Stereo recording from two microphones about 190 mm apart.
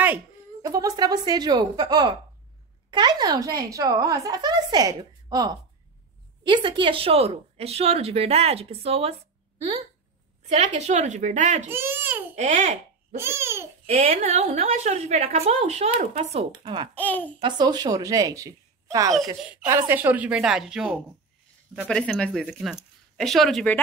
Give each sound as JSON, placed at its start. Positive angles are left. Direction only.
{"t": 0.0, "sound": "a woman's voice", "side_deg": -15}
{"t": 10.4, "sound": "speech", "side_deg": -35}
{"t": 11.7, "sound": "babbling", "side_deg": -10}
{"t": 12.4, "sound": "speech", "side_deg": -40}
{"t": 13.2, "sound": "a child's voice", "side_deg": -15}
{"t": 13.8, "sound": "a child's voice", "side_deg": -50}
{"t": 14.5, "sound": "speech", "side_deg": -35}
{"t": 16.9, "sound": "a child's voice", "side_deg": 10}
{"t": 17.4, "sound": "a woman's voice", "side_deg": -25}
{"t": 19.4, "sound": "speech", "side_deg": -5}